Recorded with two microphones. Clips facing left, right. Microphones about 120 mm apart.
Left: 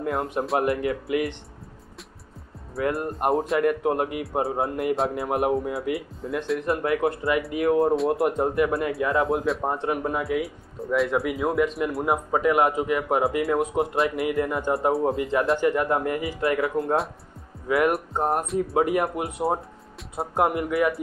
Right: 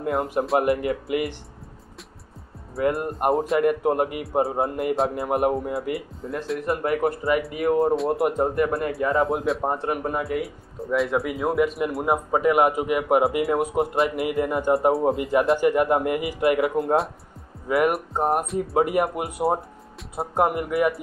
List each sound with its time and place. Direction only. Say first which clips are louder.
0.0 s speech: right 2 dB; 5° right (ahead or behind)
2.7 s speech: right 2 dB; centre (ahead or behind)
17.6 s speech: right 1 dB; centre (ahead or behind)